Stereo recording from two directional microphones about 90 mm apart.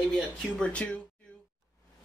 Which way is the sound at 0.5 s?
15° left (ahead or behind).